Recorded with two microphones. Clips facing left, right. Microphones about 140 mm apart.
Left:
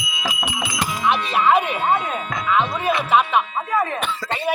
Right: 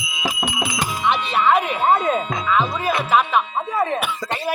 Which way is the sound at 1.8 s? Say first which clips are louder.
Right 3 dB; 25° right (ahead or behind).